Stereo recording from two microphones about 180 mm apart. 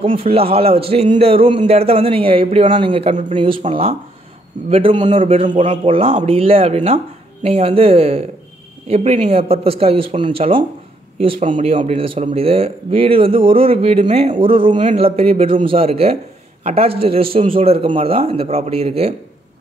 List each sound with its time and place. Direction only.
0.0 s speech: 30° right (ahead or behind)
11.3 s a man's voice: 45° right (ahead or behind)
11.7 s speech: 35° right (ahead or behind)
14.8 s a man's voice: 45° right (ahead or behind)
15.0 s speech: 35° right (ahead or behind)